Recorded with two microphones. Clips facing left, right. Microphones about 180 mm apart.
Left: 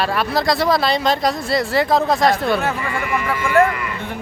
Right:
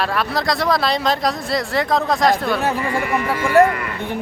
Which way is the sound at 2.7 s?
35° right (ahead or behind).